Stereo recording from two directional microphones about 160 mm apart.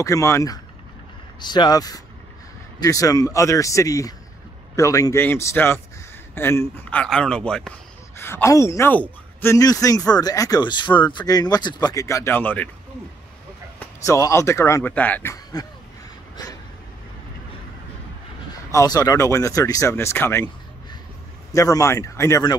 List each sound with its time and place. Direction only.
0.0 s speech: 20° left (ahead or behind)
13.7 s speech: 20° left (ahead or behind)
15.6 s speech: 25° left (ahead or behind)
18.7 s speech: 20° left (ahead or behind)
21.5 s speech: 20° left (ahead or behind)